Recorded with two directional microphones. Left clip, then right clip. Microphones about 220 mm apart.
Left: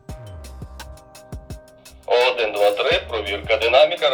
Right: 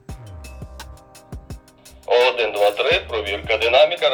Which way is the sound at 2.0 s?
5° right (ahead or behind).